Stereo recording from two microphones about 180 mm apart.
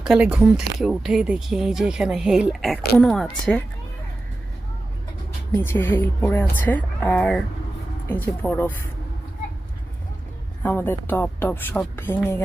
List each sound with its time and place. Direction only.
0.0 s speech: 5° right (ahead or behind)
5.6 s speech: 10° left (ahead or behind)
10.6 s speech: 10° left (ahead or behind)